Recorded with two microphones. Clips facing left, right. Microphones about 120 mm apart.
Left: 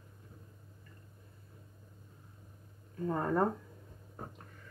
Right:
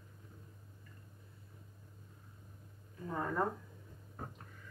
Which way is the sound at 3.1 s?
40° left (ahead or behind).